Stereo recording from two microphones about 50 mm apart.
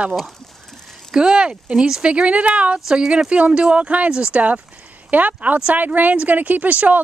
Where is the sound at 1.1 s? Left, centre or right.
Centre.